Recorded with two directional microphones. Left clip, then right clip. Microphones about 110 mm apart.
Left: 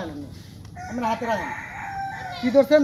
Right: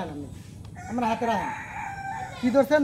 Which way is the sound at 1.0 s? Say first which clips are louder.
Left 1 dB; 20° right (ahead or behind).